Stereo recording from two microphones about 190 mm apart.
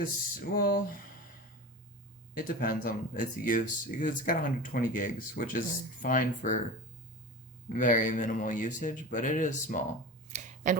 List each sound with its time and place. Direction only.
0.5 s speech: 50° left (ahead or behind)
2.3 s speech: 50° left (ahead or behind)
7.7 s speech: 40° left (ahead or behind)
10.2 s a sound: 40° right (ahead or behind)